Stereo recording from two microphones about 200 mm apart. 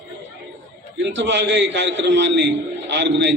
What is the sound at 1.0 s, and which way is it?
A man's voice, 60° right (ahead or behind).